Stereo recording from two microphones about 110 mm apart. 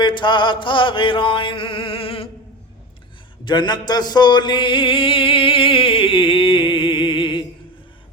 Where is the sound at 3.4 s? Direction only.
40° left (ahead or behind).